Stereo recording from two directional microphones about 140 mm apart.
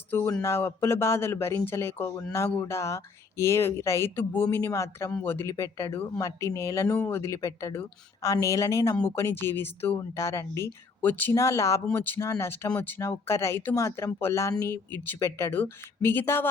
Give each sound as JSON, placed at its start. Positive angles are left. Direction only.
{"t": 0.1, "sound": "speech", "side_deg": 15}